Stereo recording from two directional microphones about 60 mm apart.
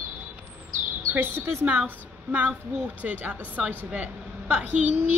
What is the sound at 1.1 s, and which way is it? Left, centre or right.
Speech, right.